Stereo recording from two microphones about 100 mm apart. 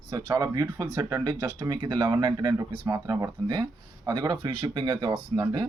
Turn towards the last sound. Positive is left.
turn(degrees=-60)  # may be behind; listen again after turning